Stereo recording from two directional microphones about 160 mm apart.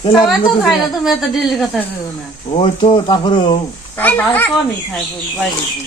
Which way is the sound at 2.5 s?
35° left (ahead or behind).